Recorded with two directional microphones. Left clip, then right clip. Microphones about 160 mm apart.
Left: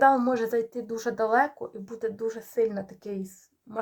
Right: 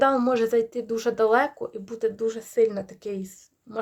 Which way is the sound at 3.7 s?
20° right (ahead or behind).